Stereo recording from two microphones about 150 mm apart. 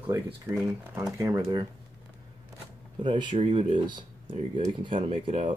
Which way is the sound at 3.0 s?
30° right (ahead or behind).